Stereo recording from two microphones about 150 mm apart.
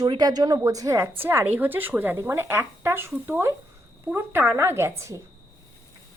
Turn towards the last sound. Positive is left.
turn(degrees=-20)  # may be behind; listen again after turning